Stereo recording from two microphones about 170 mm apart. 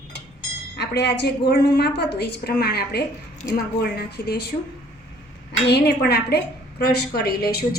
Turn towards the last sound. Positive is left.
turn(degrees=70)  # may be behind; listen again after turning